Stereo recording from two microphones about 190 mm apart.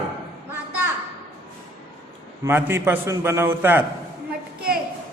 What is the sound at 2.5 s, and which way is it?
A man's voice, 10° right (ahead or behind).